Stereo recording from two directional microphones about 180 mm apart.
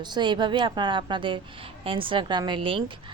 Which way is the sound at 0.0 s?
25° right (ahead or behind).